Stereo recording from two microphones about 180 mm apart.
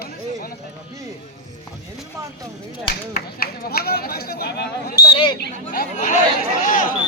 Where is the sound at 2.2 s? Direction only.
20° right (ahead or behind).